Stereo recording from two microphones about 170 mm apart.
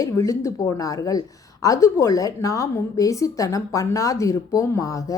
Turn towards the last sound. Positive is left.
turn(degrees=20)  # may be behind; listen again after turning